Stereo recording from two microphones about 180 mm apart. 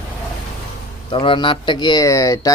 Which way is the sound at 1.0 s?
30° left (ahead or behind).